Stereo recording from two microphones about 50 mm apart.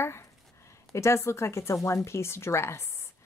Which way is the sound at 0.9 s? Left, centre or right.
Left.